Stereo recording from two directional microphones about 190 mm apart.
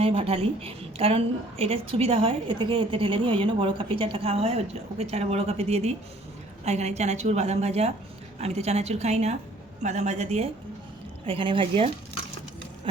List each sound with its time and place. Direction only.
0.0 s a woman's voice: 30° right (ahead or behind)